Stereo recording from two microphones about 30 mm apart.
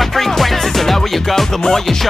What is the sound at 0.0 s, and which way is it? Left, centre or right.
Music, centre.